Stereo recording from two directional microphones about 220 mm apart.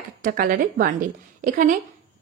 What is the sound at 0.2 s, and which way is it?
Speech, 40° right (ahead or behind).